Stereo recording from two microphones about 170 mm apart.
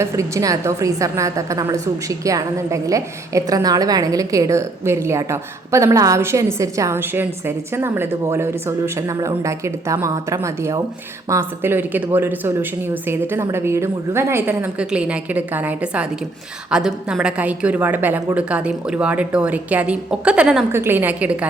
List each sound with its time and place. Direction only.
0.0 s a woman's voice: 20° right (ahead or behind)